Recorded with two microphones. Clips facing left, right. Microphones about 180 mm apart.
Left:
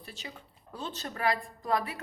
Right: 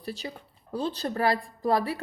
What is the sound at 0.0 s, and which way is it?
A woman's voice, 35° right (ahead or behind).